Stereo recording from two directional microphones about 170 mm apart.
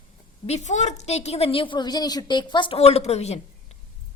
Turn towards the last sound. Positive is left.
turn(degrees=40)  # may be behind; listen again after turning